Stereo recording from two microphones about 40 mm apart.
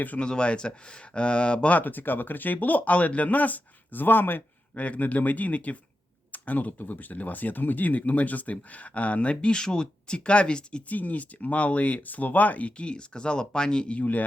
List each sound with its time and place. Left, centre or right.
0.2 s speech: left
1.7 s speech: left
4.7 s speech: left
9.3 s speech: left
10.8 s speech: left
14.0 s speech: left